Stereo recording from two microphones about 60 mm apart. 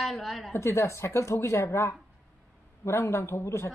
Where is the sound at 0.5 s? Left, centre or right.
Left.